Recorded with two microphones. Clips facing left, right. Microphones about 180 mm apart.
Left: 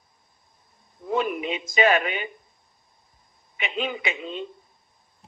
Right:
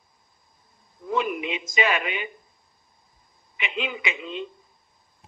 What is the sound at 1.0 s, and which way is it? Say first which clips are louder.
A man's voice: left 1 dB; 40° left (ahead or behind).